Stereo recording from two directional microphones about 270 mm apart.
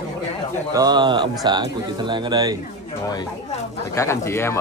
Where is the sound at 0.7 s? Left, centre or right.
Centre.